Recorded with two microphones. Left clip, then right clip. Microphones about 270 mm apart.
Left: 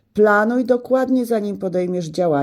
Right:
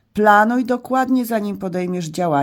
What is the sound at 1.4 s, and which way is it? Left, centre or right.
Speech, right.